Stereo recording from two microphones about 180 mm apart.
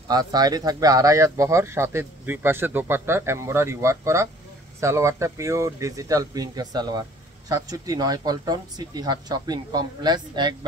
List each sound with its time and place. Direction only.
0.1 s speech: 20° right (ahead or behind)